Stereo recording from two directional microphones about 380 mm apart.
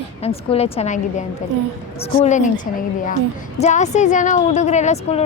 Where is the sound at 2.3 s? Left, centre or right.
Centre.